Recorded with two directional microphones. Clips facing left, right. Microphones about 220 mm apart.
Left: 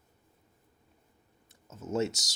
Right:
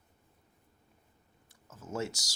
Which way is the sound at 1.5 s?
20° left (ahead or behind).